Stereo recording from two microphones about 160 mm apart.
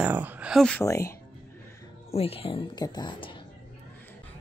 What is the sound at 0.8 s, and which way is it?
Speech, 15° left (ahead or behind).